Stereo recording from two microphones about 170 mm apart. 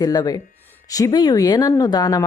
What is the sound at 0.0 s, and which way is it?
Speech, 20° left (ahead or behind).